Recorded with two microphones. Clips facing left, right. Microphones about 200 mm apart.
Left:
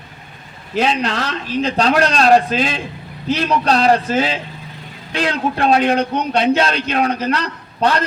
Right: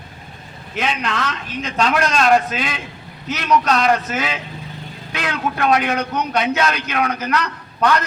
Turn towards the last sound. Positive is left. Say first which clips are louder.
# left 1 dB
turn(degrees=30)  # may be behind; listen again after turning